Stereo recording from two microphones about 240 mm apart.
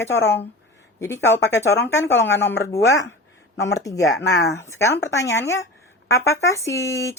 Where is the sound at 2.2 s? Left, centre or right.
Left.